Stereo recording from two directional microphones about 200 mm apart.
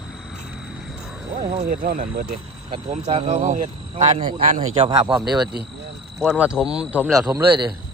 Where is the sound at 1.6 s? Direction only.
45° right (ahead or behind).